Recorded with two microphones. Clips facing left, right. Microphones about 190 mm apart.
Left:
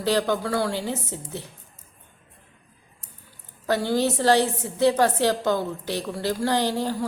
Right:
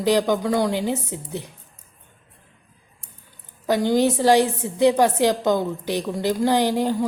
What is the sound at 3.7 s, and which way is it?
A woman's voice, 15° right (ahead or behind).